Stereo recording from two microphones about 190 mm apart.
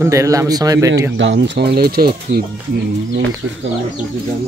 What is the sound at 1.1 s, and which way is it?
Speech, 70° right (ahead or behind).